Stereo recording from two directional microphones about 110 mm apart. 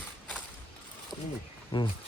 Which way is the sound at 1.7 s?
50° left (ahead or behind).